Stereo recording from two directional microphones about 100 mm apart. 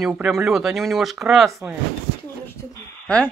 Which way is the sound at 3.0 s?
10° left (ahead or behind).